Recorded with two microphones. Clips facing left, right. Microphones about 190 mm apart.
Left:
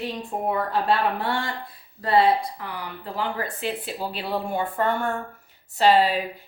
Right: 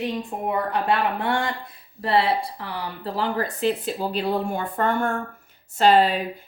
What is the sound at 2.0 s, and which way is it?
Speech, 30° right (ahead or behind).